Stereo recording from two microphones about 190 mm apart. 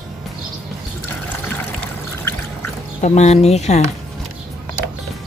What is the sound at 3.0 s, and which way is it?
Speech, 35° left (ahead or behind).